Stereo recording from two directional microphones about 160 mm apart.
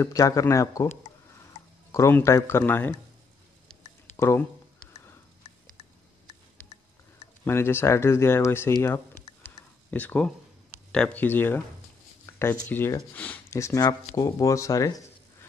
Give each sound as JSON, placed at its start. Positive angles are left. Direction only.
{"t": 0.0, "sound": "speech", "side_deg": 20}
{"t": 4.2, "sound": "speech", "side_deg": 15}
{"t": 7.4, "sound": "speech", "side_deg": 15}
{"t": 9.8, "sound": "speech", "side_deg": 10}